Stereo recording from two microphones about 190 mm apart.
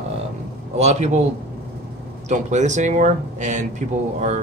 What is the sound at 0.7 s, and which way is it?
Speech, 35° right (ahead or behind).